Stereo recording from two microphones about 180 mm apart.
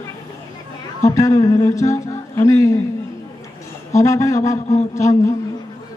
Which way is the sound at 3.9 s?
15° left (ahead or behind).